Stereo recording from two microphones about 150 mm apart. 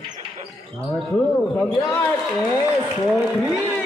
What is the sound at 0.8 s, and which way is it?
Speech, 10° left (ahead or behind).